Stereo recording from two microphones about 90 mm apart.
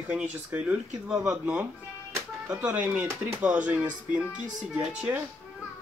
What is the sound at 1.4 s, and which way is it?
Speech, 15° right (ahead or behind).